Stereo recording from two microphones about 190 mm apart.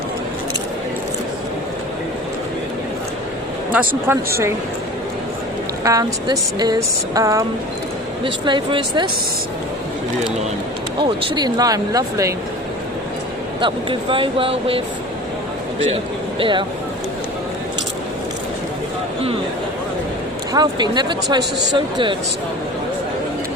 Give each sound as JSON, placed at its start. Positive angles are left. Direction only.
{"t": 3.7, "sound": "speech", "side_deg": -10}
{"t": 5.8, "sound": "speech", "side_deg": -20}
{"t": 11.3, "sound": "speech", "side_deg": -20}
{"t": 13.6, "sound": "speech", "side_deg": -25}
{"t": 16.4, "sound": "speech", "side_deg": -25}
{"t": 20.5, "sound": "speech", "side_deg": -20}